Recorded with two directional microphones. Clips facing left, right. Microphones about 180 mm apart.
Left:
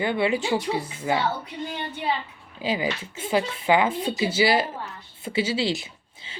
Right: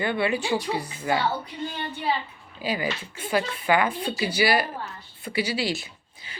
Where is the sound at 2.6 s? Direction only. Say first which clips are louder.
Left 2 dB; 20° left (ahead or behind).